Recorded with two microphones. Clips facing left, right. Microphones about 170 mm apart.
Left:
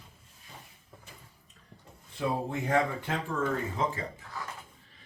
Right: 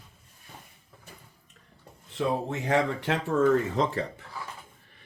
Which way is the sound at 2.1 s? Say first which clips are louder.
Right 3 dB; 80° right.